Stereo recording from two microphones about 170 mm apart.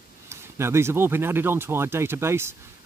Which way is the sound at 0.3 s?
15° right (ahead or behind).